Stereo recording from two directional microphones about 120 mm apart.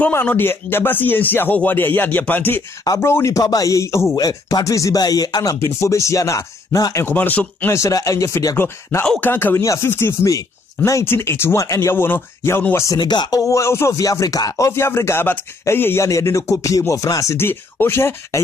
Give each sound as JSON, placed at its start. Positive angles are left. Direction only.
{"t": 0.0, "sound": "speech", "side_deg": 15}
{"t": 2.8, "sound": "speech", "side_deg": 25}
{"t": 7.2, "sound": "speech", "side_deg": 15}